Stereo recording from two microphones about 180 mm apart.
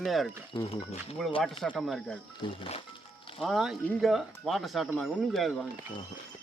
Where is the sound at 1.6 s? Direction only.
Centre (ahead or behind).